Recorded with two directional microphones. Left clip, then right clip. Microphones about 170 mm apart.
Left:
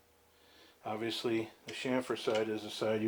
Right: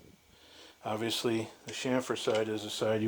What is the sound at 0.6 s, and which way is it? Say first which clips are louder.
Speech: right 4 dB; 70° right (ahead or behind).